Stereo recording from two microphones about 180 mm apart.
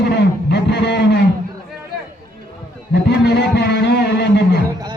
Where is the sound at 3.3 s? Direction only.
70° left (ahead or behind).